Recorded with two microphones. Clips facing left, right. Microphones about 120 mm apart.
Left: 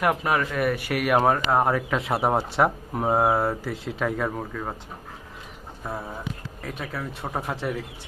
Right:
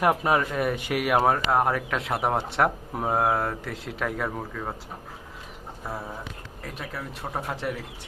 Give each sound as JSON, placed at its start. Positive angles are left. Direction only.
{"t": 0.2, "sound": "speech", "side_deg": -25}
{"t": 1.2, "sound": "speech", "side_deg": 0}
{"t": 5.8, "sound": "speech", "side_deg": 0}